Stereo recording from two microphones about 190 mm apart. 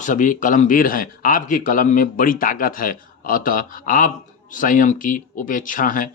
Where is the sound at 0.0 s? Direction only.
40° left (ahead or behind).